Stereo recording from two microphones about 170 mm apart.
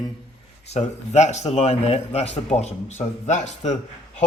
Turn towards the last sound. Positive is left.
turn(degrees=45)  # may be behind; listen again after turning